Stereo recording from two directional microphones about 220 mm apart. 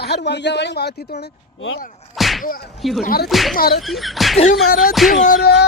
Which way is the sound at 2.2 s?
Centre (ahead or behind).